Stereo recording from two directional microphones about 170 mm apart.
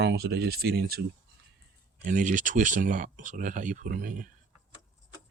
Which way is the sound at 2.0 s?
50° right (ahead or behind).